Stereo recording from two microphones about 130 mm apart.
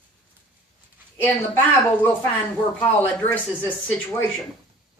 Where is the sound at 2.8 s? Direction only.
15° left (ahead or behind).